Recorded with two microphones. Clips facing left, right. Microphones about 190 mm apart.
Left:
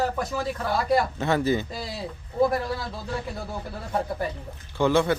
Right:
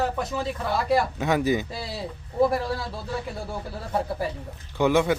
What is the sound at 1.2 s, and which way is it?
Speech, 15° right (ahead or behind).